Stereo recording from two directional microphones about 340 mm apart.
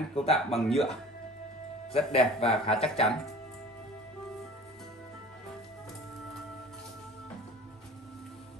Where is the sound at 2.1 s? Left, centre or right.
Centre.